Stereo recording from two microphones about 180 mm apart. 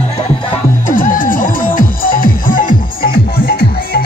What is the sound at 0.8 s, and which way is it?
Music, 50° left (ahead or behind).